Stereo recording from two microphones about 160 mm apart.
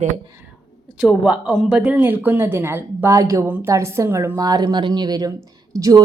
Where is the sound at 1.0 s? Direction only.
5° right (ahead or behind).